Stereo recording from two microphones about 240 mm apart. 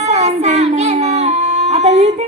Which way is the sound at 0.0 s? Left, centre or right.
Right.